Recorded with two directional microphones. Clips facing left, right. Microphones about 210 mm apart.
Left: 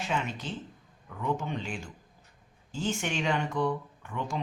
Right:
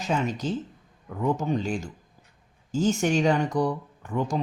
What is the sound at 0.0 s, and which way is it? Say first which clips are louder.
Speech: right 6 dB; 40° right (ahead or behind).